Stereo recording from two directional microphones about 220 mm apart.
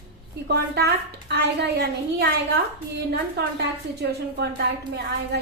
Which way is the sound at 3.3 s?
50° right (ahead or behind).